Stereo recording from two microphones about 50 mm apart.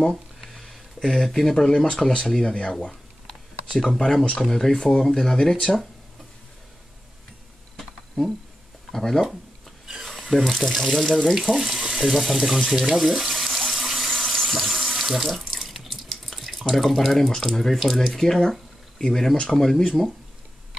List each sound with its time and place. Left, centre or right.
0.0 s a sound: centre
2.0 s speech: centre
2.8 s speech: centre
7.7 s a sound: centre
8.9 s speech: centre
14.3 s sink: centre
19.4 s speech: centre